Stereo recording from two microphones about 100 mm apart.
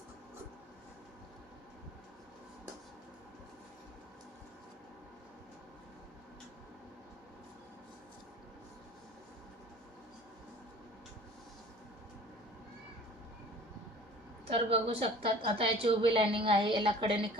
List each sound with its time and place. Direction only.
14.4 s a woman's voice: 80° right; by 17.2 s 60° right (ahead or behind)